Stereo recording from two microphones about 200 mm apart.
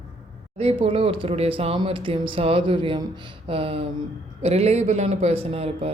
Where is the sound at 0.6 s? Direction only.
25° right (ahead or behind).